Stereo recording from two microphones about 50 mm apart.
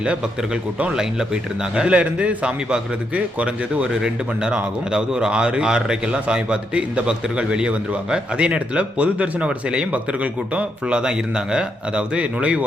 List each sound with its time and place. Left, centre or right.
0.0 s a man's voice: right